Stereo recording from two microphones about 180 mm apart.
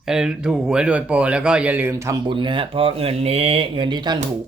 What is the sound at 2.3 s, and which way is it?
Speech, 25° right (ahead or behind).